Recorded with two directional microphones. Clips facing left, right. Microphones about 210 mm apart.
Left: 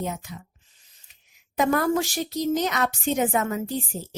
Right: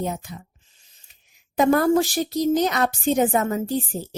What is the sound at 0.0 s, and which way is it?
Speech, 35° right (ahead or behind).